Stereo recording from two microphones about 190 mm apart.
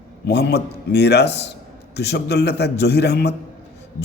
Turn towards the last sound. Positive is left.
turn(degrees=60)  # may be behind; listen again after turning